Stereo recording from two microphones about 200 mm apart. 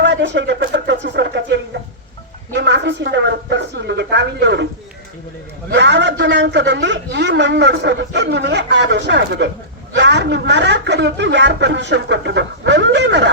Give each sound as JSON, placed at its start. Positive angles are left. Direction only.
{"t": 0.0, "sound": "a sound", "side_deg": -60}
{"t": 2.6, "sound": "a man's voice", "side_deg": -60}
{"t": 5.7, "sound": "a man's voice", "side_deg": -60}